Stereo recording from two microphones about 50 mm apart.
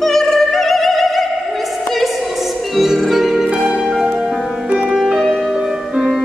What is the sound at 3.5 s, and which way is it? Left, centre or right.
Music, centre.